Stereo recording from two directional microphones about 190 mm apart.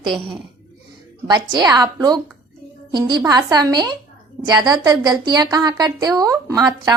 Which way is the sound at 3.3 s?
20° right (ahead or behind).